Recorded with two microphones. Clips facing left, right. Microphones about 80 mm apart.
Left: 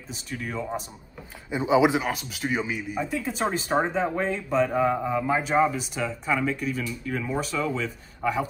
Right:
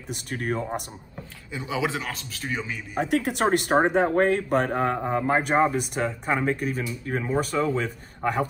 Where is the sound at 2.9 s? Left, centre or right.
Right.